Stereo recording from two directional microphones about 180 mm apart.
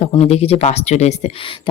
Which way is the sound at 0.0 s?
35° left (ahead or behind).